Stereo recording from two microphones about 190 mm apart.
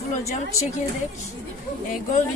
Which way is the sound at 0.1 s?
35° left (ahead or behind).